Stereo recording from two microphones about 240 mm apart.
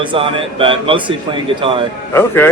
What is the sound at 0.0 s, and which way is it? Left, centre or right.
A man's voice, right.